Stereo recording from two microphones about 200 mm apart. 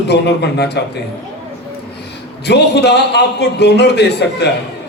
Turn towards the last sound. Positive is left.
turn(degrees=55)  # may be behind; listen again after turning